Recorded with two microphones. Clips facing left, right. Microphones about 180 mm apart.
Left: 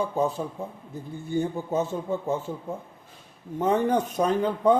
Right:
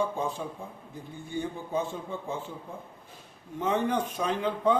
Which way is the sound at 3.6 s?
45° left (ahead or behind).